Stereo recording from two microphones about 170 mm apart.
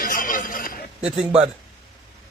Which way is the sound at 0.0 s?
55° left (ahead or behind).